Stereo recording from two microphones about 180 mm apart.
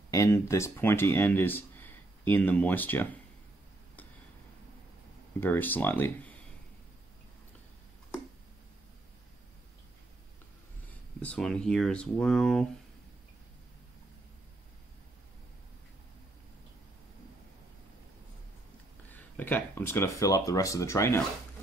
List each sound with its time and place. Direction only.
0.1 s speech: 15° left (ahead or behind)
5.4 s speech: 10° left (ahead or behind)
11.1 s speech: 5° left (ahead or behind)
19.0 s speech: 10° left (ahead or behind)